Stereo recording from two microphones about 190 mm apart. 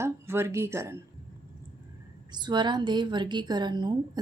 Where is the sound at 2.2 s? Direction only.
25° right (ahead or behind).